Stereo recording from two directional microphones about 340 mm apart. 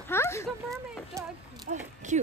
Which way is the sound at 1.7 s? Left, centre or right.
Right.